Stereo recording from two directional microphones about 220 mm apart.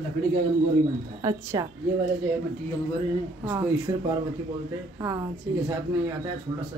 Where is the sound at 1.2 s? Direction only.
15° right (ahead or behind).